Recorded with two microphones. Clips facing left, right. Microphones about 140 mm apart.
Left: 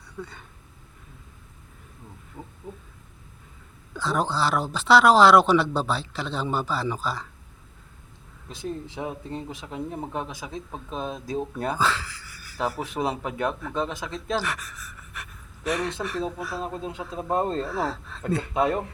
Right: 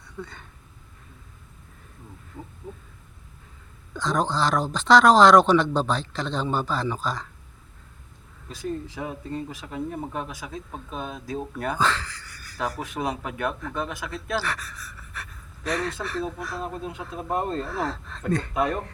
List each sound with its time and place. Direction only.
0.2 s speech: 10° left (ahead or behind)
2.4 s a sound: 20° left (ahead or behind)
3.9 s speech: 10° left (ahead or behind)
8.4 s speech: 25° left (ahead or behind)
11.8 s speech: 10° left (ahead or behind)
12.8 s speech: 30° left (ahead or behind); by 16.6 s 10° left (ahead or behind)
16.6 s speech: 25° left (ahead or behind)
17.7 s speech: 5° left (ahead or behind)